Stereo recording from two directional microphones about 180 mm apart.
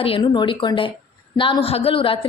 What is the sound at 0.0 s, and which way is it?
A woman's voice, 30° left (ahead or behind).